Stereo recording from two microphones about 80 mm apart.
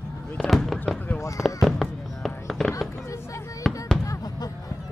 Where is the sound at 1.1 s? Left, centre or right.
Left.